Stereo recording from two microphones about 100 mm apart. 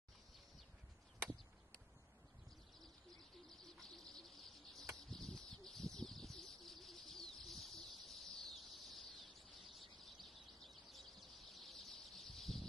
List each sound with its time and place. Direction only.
3.4 s bird: 5° left (ahead or behind)